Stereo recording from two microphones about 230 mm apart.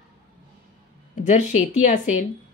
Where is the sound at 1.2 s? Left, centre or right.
Left.